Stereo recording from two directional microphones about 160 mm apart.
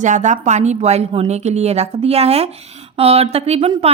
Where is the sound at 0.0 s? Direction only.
50° right (ahead or behind).